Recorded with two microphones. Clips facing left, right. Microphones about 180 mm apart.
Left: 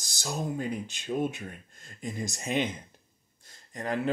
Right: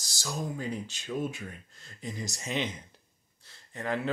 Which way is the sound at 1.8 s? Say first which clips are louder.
Left 3 dB; 50° left (ahead or behind).